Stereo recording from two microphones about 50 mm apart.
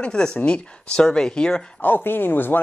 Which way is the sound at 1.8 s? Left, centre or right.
Left.